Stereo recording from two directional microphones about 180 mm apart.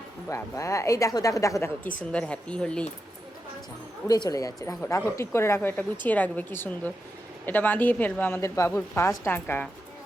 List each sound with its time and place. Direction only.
0.3 s a woman's voice: 15° left (ahead or behind)
4.0 s a woman's voice: 20° left (ahead or behind)